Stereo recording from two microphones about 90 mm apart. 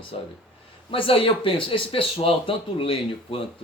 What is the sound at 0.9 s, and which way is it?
Speech, 90° left.